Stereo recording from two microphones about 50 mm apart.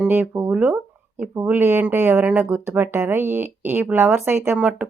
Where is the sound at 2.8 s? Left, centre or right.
Right.